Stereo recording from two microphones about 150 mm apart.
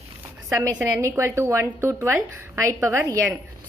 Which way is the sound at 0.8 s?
20° right (ahead or behind).